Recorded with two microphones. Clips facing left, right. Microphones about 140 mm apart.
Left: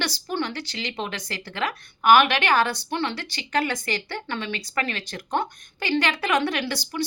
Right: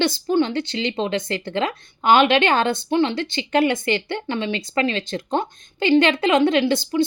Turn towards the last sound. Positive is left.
turn(degrees=-20)  # may be behind; listen again after turning